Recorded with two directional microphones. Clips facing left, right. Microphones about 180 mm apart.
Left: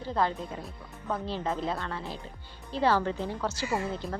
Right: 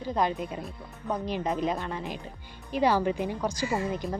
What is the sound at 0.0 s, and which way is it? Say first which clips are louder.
Speech: right 2 dB; 15° right (ahead or behind).